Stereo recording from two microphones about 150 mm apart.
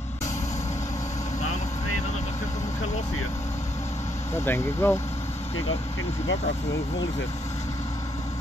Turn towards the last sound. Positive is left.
turn(degrees=20)  # may be behind; listen again after turning